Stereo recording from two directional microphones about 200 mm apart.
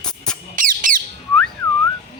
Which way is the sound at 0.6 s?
40° right (ahead or behind).